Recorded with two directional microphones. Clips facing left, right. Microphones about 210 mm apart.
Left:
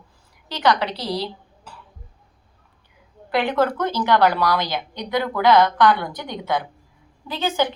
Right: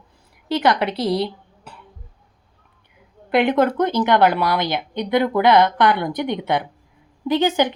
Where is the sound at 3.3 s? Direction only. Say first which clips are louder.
Right 4 dB; 20° right (ahead or behind).